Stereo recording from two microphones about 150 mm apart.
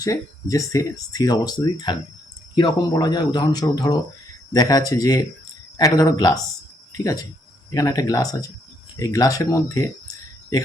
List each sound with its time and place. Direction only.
0.0 s speech: 20° left (ahead or behind)